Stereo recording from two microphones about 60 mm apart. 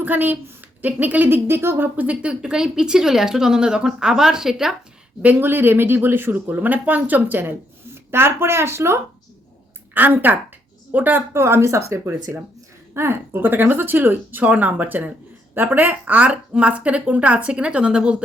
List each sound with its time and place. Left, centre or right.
0.0 s speech: right
2.0 s speech: centre
5.2 s speech: right
8.1 s speech: right
9.9 s a woman's voice: right
11.3 s speech: right; by 18.2 s centre